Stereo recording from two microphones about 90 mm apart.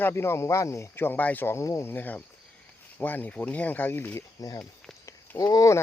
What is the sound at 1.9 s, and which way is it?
Speech, 20° left (ahead or behind).